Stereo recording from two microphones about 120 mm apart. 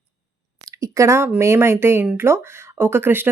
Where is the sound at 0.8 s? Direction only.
25° right (ahead or behind).